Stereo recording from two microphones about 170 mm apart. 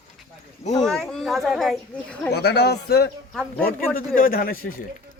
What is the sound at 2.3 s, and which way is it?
Speech, 80° left.